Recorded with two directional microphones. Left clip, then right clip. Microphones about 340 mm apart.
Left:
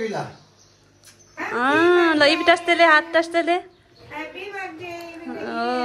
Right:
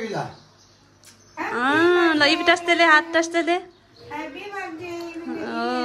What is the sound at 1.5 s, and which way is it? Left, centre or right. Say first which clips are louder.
A woman's voice: left 1 dB; centre.